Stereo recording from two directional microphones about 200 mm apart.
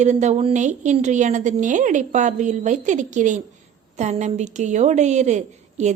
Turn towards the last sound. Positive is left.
turn(degrees=-35)  # may be behind; listen again after turning